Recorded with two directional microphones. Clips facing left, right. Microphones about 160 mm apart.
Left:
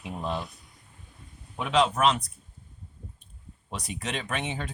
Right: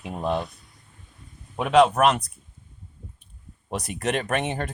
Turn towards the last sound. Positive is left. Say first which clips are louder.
# right 6 dB
turn(degrees=-55)  # may be behind; listen again after turning